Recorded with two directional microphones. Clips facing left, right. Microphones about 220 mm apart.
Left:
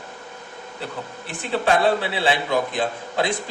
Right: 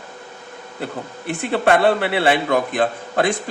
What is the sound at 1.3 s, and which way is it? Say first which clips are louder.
A man's voice: right 4 dB; 60° right (ahead or behind).